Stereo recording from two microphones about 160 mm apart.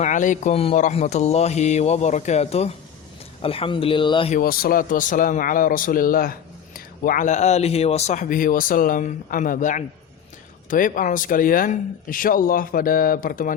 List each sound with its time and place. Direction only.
0.0 s speech: 50° left (ahead or behind); by 4.3 s 30° left (ahead or behind)
4.4 s speech: 70° left (ahead or behind)